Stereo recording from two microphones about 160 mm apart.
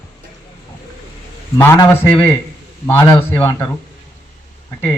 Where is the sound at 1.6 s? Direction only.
15° left (ahead or behind).